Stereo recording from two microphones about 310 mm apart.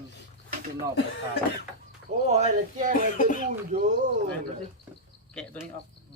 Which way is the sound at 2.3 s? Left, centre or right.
Right.